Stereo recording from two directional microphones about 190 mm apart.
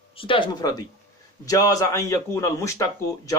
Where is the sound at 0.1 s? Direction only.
30° left (ahead or behind).